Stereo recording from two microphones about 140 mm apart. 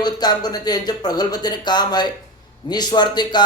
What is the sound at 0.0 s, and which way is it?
Speech, 30° left (ahead or behind).